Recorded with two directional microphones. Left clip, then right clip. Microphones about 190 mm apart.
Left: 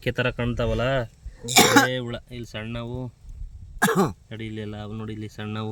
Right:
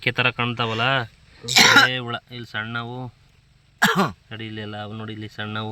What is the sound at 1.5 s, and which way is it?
Speech, 45° left (ahead or behind).